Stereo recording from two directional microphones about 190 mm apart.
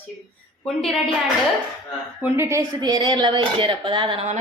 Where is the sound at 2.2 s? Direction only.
10° right (ahead or behind).